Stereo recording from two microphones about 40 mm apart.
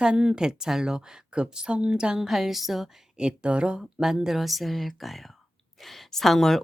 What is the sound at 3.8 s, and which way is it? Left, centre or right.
A woman's voice, centre.